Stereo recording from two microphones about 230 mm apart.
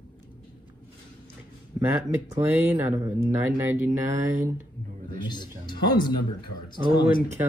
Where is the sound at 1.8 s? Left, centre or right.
Centre.